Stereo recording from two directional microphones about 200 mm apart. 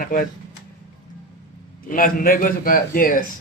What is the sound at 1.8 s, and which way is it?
A man's voice, 45° left (ahead or behind).